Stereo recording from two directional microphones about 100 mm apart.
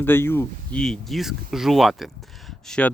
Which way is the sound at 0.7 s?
5° left (ahead or behind).